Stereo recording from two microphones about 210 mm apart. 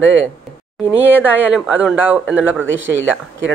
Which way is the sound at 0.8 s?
10° right (ahead or behind).